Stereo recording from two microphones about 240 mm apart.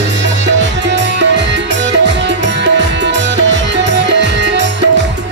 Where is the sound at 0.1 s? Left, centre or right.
Right.